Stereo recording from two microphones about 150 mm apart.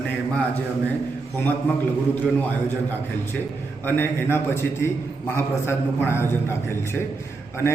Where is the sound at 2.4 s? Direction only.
10° left (ahead or behind).